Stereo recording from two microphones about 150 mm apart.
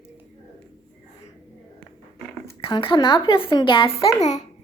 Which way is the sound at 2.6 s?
35° left (ahead or behind).